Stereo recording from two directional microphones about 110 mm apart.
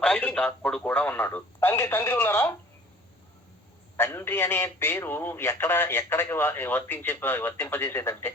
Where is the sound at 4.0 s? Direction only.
20° left (ahead or behind).